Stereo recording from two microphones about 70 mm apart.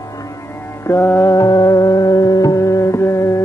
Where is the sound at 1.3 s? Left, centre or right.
Left.